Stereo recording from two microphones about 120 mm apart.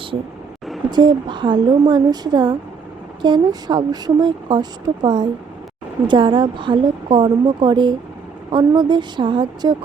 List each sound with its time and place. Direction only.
0.9 s a woman's voice: 40° right (ahead or behind)